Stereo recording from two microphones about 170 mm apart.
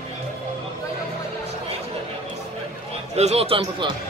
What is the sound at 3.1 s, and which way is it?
Speech, 40° right (ahead or behind).